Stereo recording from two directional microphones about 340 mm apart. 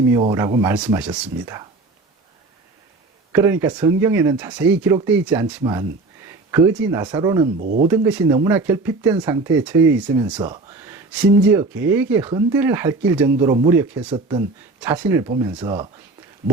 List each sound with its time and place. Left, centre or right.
0.1 s speech: centre
3.3 s speech: centre
7.6 s speech: right
7.9 s speech: centre